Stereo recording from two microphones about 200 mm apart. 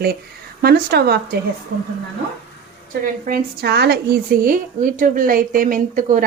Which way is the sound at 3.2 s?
50° right (ahead or behind).